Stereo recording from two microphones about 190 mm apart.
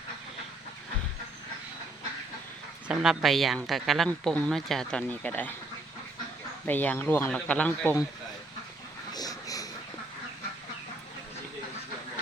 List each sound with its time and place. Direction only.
2.8 s a woman's voice: 5° right (ahead or behind)
6.7 s speech: 10° left (ahead or behind)
9.1 s a sound: 20° left (ahead or behind)